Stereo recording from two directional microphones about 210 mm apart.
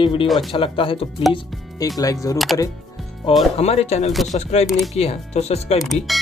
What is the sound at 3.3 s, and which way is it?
Speech, 25° left (ahead or behind).